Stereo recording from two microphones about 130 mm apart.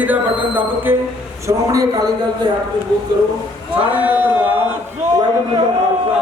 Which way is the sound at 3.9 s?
15° right (ahead or behind).